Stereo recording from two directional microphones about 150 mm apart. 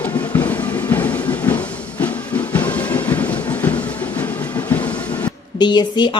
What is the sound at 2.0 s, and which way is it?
Music, 10° left (ahead or behind).